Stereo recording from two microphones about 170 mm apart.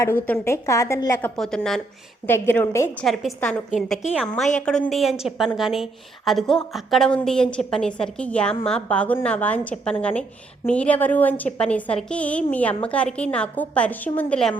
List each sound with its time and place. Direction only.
0.0 s a woman's voice: 15° left (ahead or behind)
1.4 s a woman's voice: 5° left (ahead or behind)